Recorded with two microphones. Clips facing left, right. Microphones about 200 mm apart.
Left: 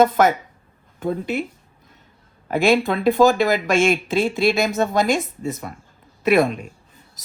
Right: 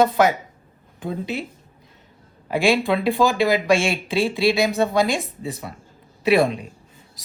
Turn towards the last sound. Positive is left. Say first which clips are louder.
# left 1 dB
turn(degrees=50)  # may be behind; listen again after turning